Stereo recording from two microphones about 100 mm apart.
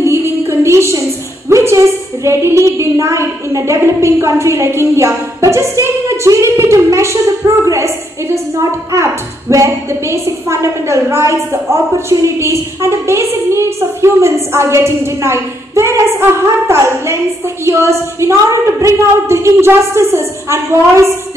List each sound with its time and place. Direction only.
0.0 s music: 25° right (ahead or behind)
1.5 s a woman's voice: 30° right (ahead or behind)